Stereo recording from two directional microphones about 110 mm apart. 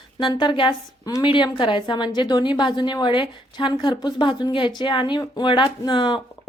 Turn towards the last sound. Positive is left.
turn(degrees=45)  # may be behind; listen again after turning